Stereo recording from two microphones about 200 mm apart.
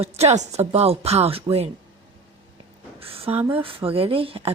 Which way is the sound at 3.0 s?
30° right (ahead or behind).